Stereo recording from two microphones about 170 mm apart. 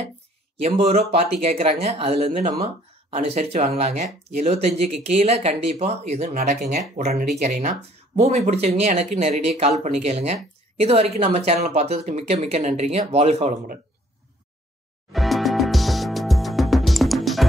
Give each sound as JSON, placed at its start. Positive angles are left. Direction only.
{"t": 0.6, "sound": "speech", "side_deg": -40}
{"t": 15.1, "sound": "music", "side_deg": 0}